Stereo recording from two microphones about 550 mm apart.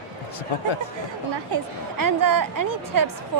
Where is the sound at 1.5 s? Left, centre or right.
Right.